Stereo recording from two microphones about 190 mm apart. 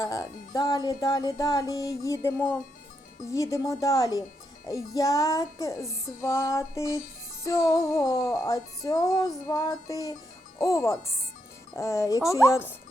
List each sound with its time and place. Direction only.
0.0 s speech: 15° left (ahead or behind)
3.2 s music: 15° left (ahead or behind)
7.4 s speech: 15° left (ahead or behind)
10.6 s music: 15° left (ahead or behind)